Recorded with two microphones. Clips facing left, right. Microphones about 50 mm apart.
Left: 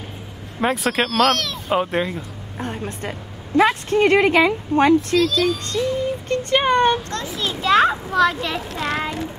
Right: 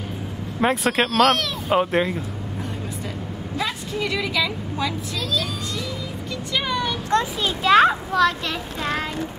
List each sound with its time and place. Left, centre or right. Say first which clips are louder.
0.6 s speech: even; centre
3.5 s speech: left 11 dB; left
5.2 s speech: left 7 dB; centre
5.7 s speech: left 9 dB; left
7.1 s speech: right 5 dB; centre